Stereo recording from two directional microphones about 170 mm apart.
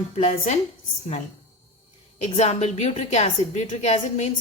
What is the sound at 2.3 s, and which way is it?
A woman's voice, 40° left (ahead or behind).